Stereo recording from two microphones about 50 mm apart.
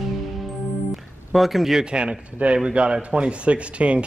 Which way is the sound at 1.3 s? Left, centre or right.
Centre.